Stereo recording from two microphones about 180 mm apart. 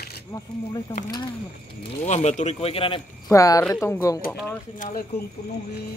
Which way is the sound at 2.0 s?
40° left (ahead or behind).